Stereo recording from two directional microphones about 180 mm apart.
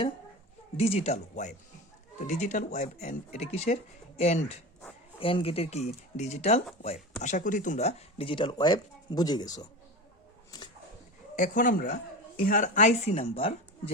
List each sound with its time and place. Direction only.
0.8 s speech: 35° left (ahead or behind)
10.5 s dog: 20° left (ahead or behind)
11.3 s speech: 45° left (ahead or behind); by 13.9 s 30° left (ahead or behind)